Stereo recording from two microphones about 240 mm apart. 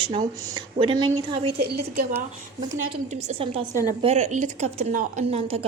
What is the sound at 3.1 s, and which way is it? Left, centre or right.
Speech, right.